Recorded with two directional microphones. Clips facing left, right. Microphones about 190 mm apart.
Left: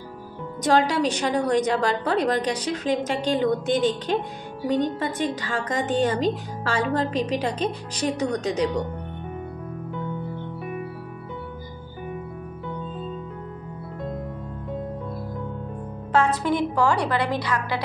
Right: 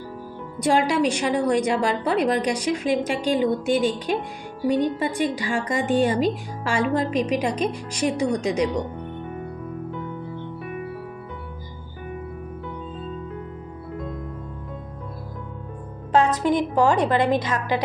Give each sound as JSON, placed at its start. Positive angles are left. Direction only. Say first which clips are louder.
{"t": 0.8, "sound": "a woman's voice", "louder": "right 2 dB", "side_deg": -10}
{"t": 16.4, "sound": "a woman's voice", "louder": "right 2 dB", "side_deg": -20}